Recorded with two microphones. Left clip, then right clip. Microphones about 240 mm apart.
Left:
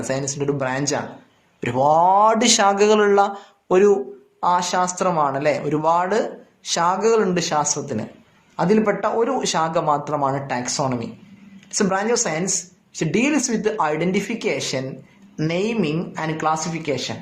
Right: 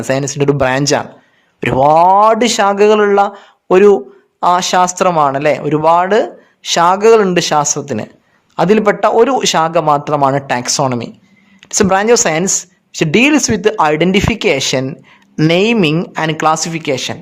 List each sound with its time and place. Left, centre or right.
0.1 s speech: right